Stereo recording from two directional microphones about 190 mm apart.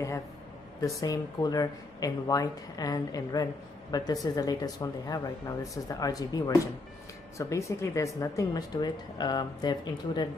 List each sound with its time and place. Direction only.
1.0 s speech: 20° left (ahead or behind)